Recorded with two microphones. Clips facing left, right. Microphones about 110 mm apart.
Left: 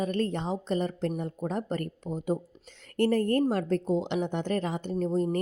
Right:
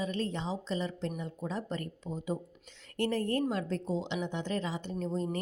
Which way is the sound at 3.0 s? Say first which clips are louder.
Left 6 dB; 50° left (ahead or behind).